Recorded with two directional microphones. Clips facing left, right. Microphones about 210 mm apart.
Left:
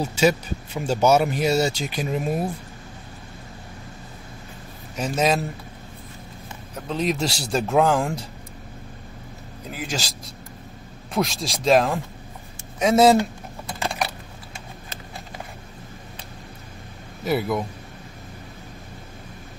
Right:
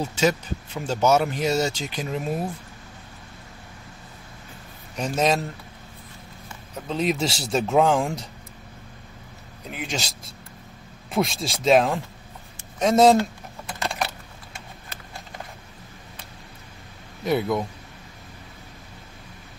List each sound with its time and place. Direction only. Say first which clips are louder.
0.0 s speech: left 3 dB; 10° left (ahead or behind)
4.9 s speech: left 1 dB; centre (ahead or behind)
6.7 s speech: even; centre (ahead or behind)
9.7 s speech: left 1 dB; 5° left (ahead or behind)
17.2 s speech: even; 5° left (ahead or behind)